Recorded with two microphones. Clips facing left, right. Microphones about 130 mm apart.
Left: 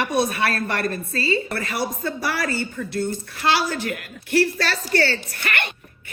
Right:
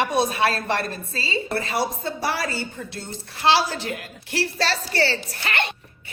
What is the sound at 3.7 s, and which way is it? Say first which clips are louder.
Speech: left 3 dB; 55° left (ahead or behind).